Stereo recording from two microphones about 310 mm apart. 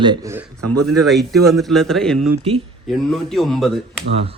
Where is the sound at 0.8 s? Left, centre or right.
Centre.